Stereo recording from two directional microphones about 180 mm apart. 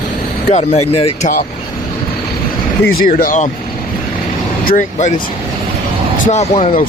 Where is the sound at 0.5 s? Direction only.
40° left (ahead or behind).